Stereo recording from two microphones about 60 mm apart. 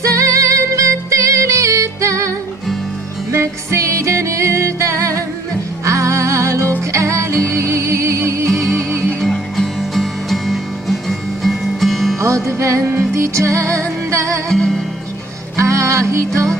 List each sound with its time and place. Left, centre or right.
0.0 s music: right
9.2 s music: centre
12.5 s music: right
14.5 s music: centre
15.5 s music: right